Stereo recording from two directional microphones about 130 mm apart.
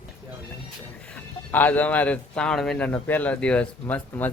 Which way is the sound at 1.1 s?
10° left (ahead or behind).